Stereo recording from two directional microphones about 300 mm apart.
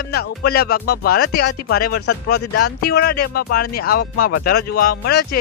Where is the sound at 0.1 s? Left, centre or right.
Left.